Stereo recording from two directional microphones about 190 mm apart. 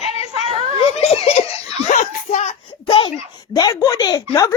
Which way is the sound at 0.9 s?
30° left (ahead or behind).